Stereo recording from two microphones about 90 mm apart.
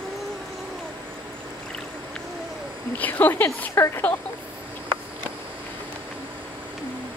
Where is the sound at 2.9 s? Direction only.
20° left (ahead or behind).